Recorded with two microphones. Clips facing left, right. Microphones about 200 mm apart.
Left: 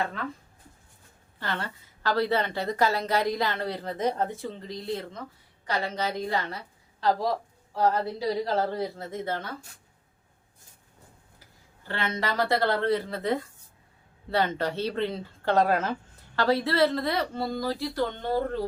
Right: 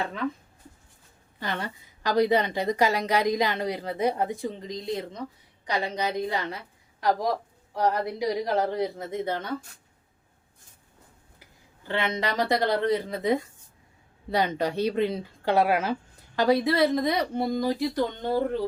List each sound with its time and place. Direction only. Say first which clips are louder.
1.4 s speech: right 1 dB; 15° right (ahead or behind)
11.3 s speech: right 1 dB; 15° right (ahead or behind)